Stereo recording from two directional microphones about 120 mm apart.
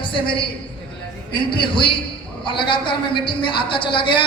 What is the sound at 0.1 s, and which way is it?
A man's voice, 45° left (ahead or behind).